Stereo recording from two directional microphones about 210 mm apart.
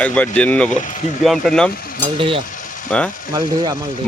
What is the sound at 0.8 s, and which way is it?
Speech, 35° left (ahead or behind).